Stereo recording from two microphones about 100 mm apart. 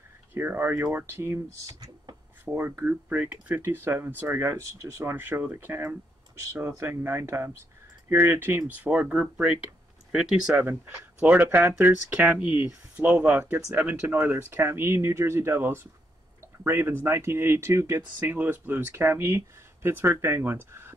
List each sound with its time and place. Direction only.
0.3 s speech: 20° right (ahead or behind)
2.4 s speech: 20° right (ahead or behind)
11.2 s speech: 15° right (ahead or behind)